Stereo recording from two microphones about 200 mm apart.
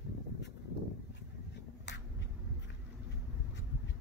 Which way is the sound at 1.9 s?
60° left (ahead or behind).